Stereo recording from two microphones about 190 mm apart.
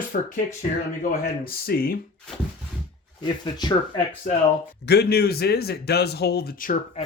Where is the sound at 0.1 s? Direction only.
50° left (ahead or behind).